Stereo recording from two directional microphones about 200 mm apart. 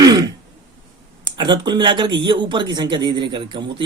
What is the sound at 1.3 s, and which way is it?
Speech, 20° right (ahead or behind).